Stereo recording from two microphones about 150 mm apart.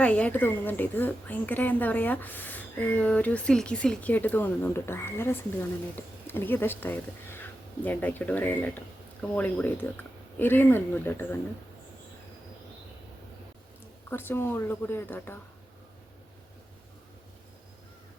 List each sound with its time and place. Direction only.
0.0 s a woman's voice: 10° left (ahead or behind)
14.1 s a woman's voice: 15° left (ahead or behind)